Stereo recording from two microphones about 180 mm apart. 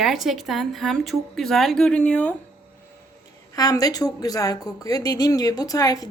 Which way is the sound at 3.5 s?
20° left (ahead or behind).